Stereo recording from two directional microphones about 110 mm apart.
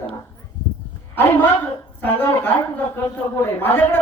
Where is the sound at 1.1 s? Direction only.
20° left (ahead or behind).